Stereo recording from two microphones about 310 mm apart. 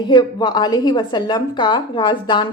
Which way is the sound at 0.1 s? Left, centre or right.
Centre.